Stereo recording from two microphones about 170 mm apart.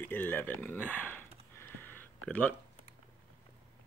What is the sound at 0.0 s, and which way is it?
Speech, 10° left (ahead or behind).